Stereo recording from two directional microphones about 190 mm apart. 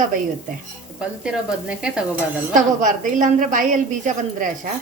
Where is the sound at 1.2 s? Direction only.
5° right (ahead or behind).